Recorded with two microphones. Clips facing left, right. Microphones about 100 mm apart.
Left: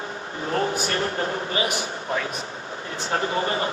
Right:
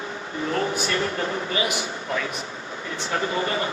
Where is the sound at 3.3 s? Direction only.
30° left (ahead or behind).